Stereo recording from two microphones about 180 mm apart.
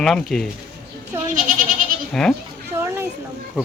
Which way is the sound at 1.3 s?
45° right (ahead or behind).